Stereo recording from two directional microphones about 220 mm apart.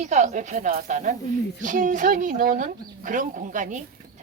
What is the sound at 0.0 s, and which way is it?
Speech, 30° right (ahead or behind).